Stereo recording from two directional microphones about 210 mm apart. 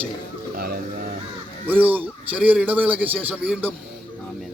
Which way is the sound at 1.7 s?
10° right (ahead or behind).